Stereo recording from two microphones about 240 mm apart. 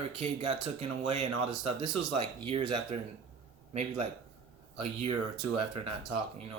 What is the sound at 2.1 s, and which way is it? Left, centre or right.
Speech, right.